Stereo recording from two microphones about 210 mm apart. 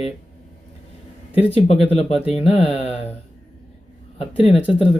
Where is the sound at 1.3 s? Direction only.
30° left (ahead or behind).